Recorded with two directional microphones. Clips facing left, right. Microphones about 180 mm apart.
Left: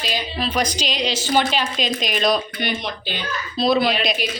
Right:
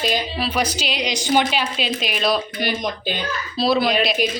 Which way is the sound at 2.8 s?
45° right (ahead or behind).